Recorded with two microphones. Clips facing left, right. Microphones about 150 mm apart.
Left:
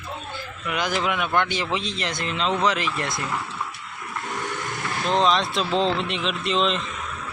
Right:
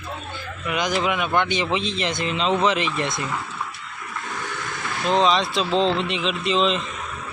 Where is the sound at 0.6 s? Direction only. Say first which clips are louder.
Right 2 dB; 10° right (ahead or behind).